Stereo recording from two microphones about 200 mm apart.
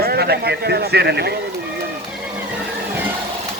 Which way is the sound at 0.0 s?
50° right (ahead or behind).